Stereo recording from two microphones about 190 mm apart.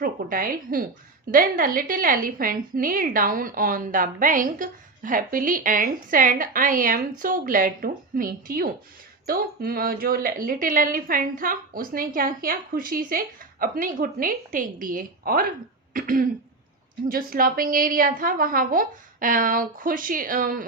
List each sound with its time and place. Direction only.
0.0 s a woman's voice: 45° right (ahead or behind)